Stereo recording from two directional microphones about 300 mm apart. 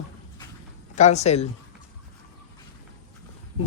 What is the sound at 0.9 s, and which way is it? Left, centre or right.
Speech, left.